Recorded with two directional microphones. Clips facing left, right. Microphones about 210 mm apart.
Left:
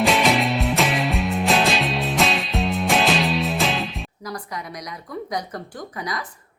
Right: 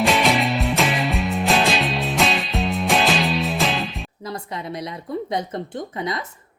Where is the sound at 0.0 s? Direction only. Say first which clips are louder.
Even; centre (ahead or behind).